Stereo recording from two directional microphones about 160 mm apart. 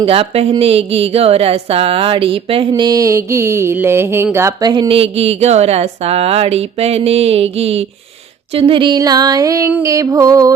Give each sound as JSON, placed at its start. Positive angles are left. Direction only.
{"t": 0.0, "sound": "speech", "side_deg": -35}
{"t": 8.5, "sound": "music", "side_deg": -35}